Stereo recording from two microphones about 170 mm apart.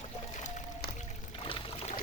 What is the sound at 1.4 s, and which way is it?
Pour, 35° left (ahead or behind).